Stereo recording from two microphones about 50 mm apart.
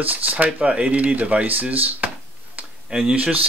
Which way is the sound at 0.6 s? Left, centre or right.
Right.